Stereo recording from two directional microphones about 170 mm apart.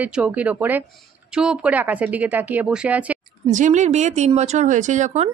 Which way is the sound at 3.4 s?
45° right (ahead or behind).